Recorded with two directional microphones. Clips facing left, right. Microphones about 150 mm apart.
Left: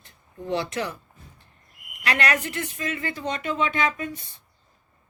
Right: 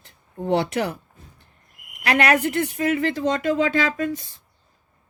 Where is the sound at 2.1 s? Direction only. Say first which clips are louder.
Right 6 dB; 60° right (ahead or behind); by 3.4 s 90° right.